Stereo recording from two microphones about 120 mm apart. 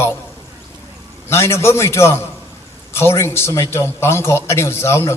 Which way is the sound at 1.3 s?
25° left (ahead or behind).